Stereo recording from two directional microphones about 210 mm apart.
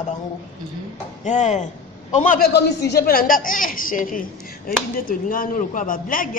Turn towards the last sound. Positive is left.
turn(degrees=40)  # may be behind; listen again after turning